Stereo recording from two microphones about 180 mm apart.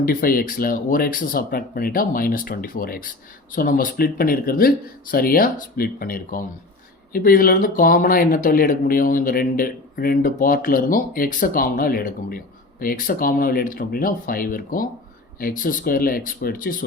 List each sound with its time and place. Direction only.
0.0 s speech: 55° left (ahead or behind)